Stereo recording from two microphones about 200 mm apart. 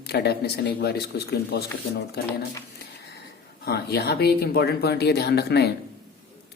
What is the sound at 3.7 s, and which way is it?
Speech, 55° left (ahead or behind).